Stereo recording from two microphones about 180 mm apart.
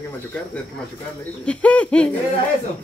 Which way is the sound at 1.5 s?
5° left (ahead or behind).